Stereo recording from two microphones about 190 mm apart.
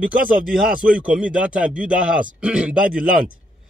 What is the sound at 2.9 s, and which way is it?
Speech, 45° right (ahead or behind).